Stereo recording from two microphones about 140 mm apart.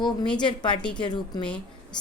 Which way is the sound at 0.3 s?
35° left (ahead or behind).